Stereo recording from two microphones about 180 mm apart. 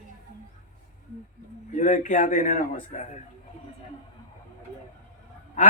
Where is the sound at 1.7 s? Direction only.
45° left (ahead or behind).